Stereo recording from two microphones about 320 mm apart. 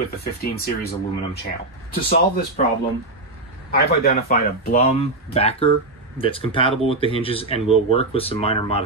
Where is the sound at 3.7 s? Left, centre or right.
Left.